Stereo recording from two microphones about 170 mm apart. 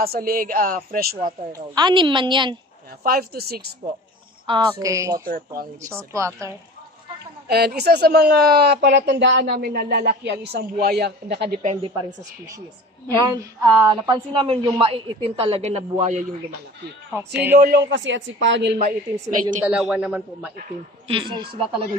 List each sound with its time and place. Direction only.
0.0 s a woman's voice: 60° right (ahead or behind)
1.5 s a woman's voice: 25° right (ahead or behind)
3.0 s a woman's voice: 65° right (ahead or behind)
4.5 s a woman's voice: 20° right (ahead or behind)
7.4 s speech: 70° right (ahead or behind)
11.6 s a man's voice: 35° right (ahead or behind)
13.3 s a man's voice: 20° right (ahead or behind); by 16.3 s 40° right (ahead or behind)
17.1 s a man's voice: 10° right (ahead or behind)
17.7 s a woman's voice: 90° right
18.8 s a woman's voice: 50° right (ahead or behind)
19.6 s a man's voice: 5° right (ahead or behind)
21.1 s a woman's voice: 25° right (ahead or behind)